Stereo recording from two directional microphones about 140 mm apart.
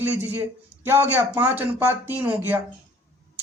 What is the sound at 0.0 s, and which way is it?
Speech, 15° right (ahead or behind).